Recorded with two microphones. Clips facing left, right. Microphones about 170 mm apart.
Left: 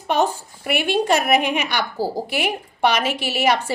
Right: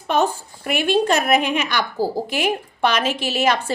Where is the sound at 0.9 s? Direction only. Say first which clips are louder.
Right 1 dB; 15° left (ahead or behind).